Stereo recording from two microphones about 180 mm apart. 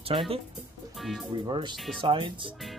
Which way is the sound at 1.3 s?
25° right (ahead or behind).